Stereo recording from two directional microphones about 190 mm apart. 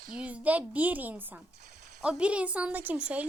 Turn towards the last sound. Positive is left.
turn(degrees=-5)  # may be behind; listen again after turning